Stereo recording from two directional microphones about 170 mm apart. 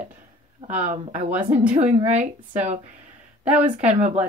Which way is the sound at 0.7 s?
45° right (ahead or behind).